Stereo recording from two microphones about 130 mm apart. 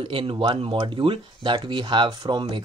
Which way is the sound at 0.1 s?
40° right (ahead or behind).